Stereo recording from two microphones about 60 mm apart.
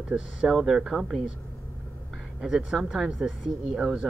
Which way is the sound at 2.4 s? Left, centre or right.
Centre.